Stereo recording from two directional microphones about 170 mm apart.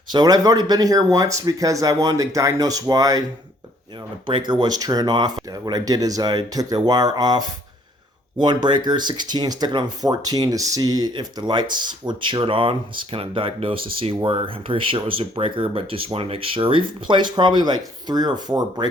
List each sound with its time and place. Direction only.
0.1 s speech: 25° right (ahead or behind)
4.3 s speech: 30° right (ahead or behind)